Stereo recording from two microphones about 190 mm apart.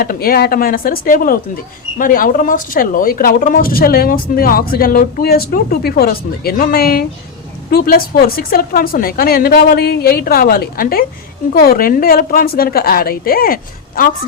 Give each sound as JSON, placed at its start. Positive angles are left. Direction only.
{"t": 0.0, "sound": "speech", "side_deg": 50}